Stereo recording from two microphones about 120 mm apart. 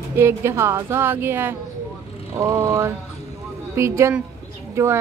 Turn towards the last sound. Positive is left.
turn(degrees=-25)  # may be behind; listen again after turning